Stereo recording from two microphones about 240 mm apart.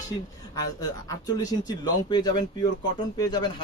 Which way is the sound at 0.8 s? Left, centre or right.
Centre.